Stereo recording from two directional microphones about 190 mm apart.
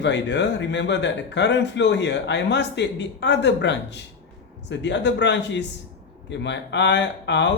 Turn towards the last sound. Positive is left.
turn(degrees=70)  # may be behind; listen again after turning